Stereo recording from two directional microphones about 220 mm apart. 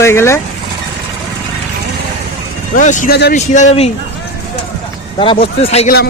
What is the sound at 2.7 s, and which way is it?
A man's voice, 35° left (ahead or behind).